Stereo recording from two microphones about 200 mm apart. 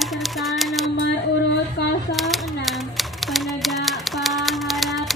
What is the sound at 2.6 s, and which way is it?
Typewriter, centre (ahead or behind).